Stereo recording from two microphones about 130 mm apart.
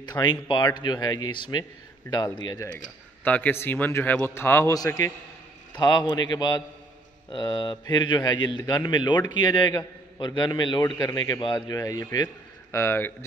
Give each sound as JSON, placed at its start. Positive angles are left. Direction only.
{"t": 0.0, "sound": "a man's voice", "side_deg": 35}
{"t": 3.3, "sound": "a man's voice", "side_deg": 15}